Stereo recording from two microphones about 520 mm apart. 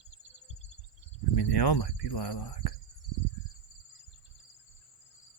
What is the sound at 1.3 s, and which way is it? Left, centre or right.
Cricket, left.